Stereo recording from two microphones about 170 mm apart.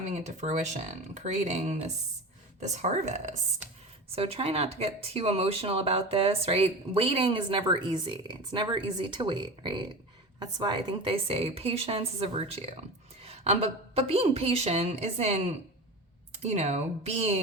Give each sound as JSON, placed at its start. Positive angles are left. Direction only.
{"t": 0.0, "sound": "speech", "side_deg": -45}